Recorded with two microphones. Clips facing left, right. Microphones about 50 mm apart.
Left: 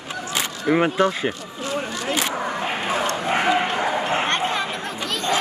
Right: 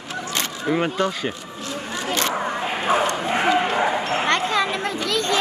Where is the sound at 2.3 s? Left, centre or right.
Centre.